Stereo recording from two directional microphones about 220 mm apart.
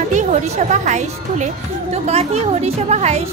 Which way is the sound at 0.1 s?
35° right (ahead or behind).